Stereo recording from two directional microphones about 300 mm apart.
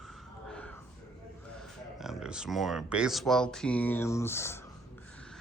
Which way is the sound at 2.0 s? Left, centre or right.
Centre.